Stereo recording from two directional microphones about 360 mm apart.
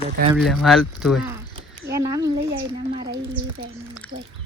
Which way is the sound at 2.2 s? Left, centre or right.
Right.